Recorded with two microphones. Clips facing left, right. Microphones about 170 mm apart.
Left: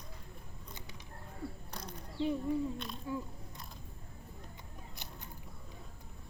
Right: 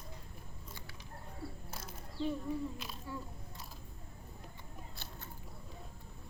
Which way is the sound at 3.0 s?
15° left (ahead or behind).